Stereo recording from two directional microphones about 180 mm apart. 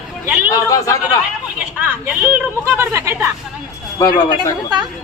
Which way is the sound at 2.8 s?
15° right (ahead or behind).